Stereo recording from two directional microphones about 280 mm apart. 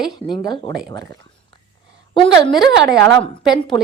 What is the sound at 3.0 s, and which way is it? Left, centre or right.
Speech, centre.